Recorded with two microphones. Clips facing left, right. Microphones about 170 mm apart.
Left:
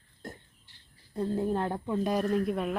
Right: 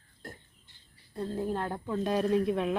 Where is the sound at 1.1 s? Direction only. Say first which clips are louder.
Left 3 dB; 20° left (ahead or behind).